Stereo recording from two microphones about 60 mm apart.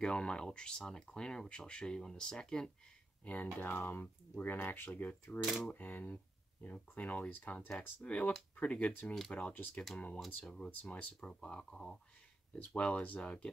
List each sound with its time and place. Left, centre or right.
0.0 s speech: centre
3.3 s speech: left
5.4 s speech: centre
5.7 s speech: left
10.1 s speech: centre
10.7 s speech: left
11.1 s speech: centre
12.7 s speech: left